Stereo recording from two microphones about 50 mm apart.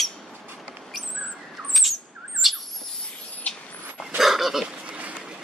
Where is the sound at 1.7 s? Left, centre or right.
Centre.